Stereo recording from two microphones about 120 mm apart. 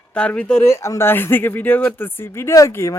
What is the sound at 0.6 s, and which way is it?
Speech, 25° left (ahead or behind).